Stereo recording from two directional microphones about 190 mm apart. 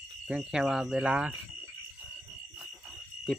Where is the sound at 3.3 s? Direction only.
5° left (ahead or behind).